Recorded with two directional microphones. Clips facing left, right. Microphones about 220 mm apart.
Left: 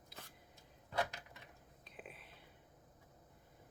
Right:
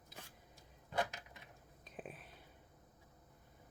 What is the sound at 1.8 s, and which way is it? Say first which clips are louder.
Whispering: right 5 dB; 45° right (ahead or behind).